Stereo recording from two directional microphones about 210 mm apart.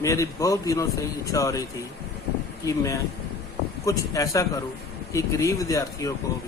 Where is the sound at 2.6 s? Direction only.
15° left (ahead or behind).